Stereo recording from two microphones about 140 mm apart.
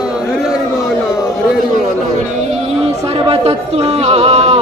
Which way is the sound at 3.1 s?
45° right (ahead or behind).